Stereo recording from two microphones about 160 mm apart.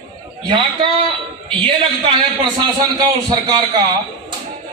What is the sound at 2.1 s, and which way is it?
A man's voice, 30° right (ahead or behind).